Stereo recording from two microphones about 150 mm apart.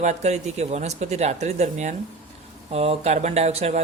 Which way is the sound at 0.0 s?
50° right (ahead or behind).